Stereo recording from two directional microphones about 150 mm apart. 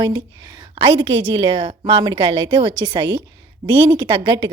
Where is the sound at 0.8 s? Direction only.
40° right (ahead or behind).